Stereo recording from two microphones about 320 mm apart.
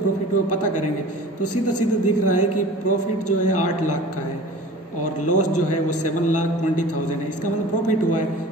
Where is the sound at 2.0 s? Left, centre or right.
Left.